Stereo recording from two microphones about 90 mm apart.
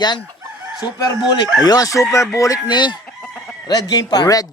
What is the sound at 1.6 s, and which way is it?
Speech, 40° left (ahead or behind).